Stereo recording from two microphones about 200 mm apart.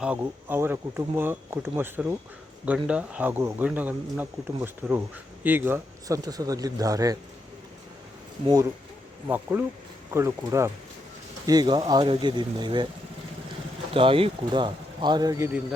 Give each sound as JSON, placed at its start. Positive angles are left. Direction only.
{"t": 0.0, "sound": "speech", "side_deg": -5}
{"t": 9.2, "sound": "speech", "side_deg": -10}
{"t": 13.9, "sound": "speech", "side_deg": -25}